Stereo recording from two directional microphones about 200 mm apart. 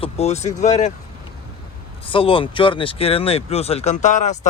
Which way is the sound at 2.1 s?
25° left (ahead or behind).